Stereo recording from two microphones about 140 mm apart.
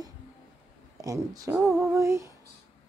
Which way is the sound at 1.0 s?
25° right (ahead or behind).